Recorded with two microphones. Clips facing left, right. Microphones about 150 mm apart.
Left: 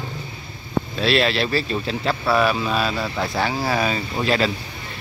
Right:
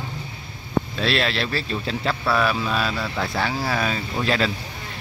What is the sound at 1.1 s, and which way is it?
Speech, 5° left (ahead or behind).